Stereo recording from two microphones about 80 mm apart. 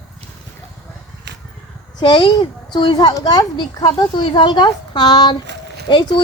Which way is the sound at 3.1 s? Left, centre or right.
Left.